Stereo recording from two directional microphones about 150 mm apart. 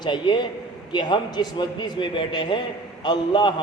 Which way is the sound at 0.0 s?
30° left (ahead or behind).